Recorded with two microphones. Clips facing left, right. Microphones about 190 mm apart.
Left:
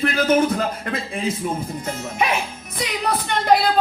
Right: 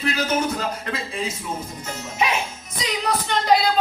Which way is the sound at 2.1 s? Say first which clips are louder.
Even; 55° left (ahead or behind).